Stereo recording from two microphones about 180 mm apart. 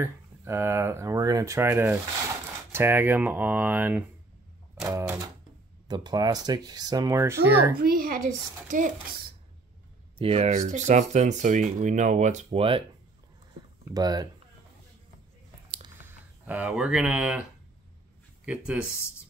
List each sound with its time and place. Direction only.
0.0 s speech: 15° right (ahead or behind)
7.7 s a child's voice: 55° right (ahead or behind)
10.1 s speech: 35° right (ahead or behind)
13.8 s speech: 20° right (ahead or behind)
16.0 s speech: 10° right (ahead or behind)